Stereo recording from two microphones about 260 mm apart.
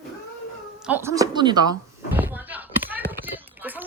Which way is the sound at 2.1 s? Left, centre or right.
Centre.